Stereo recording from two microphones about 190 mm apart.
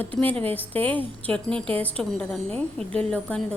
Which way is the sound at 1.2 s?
5° left (ahead or behind).